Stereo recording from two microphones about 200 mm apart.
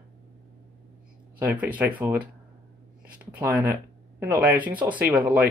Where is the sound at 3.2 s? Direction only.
10° right (ahead or behind).